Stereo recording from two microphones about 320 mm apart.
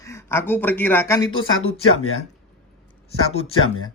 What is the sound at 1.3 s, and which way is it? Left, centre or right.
Speech, left.